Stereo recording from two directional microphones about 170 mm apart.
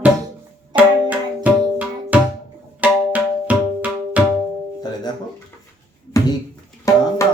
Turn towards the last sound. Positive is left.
turn(degrees=20)  # may be behind; listen again after turning